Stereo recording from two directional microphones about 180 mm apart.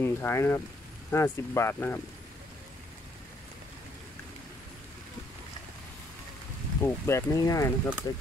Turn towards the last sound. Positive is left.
turn(degrees=15)  # may be behind; listen again after turning